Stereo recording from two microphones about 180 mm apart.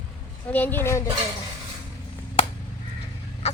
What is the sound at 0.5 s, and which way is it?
Speech, 10° left (ahead or behind).